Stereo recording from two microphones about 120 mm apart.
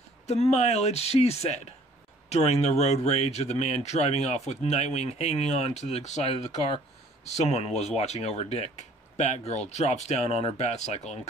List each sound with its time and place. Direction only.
0.3 s speech: 65° left (ahead or behind)